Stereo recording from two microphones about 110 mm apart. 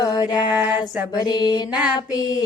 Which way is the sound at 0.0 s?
35° left (ahead or behind).